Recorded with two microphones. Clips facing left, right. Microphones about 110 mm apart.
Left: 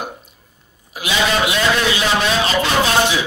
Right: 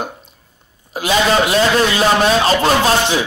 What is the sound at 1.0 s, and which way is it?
A man's voice, 40° right (ahead or behind).